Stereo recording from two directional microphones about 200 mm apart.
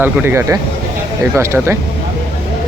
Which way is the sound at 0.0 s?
10° right (ahead or behind).